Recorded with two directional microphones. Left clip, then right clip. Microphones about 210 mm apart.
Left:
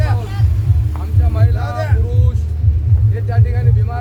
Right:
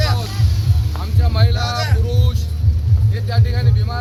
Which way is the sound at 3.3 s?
15° left (ahead or behind).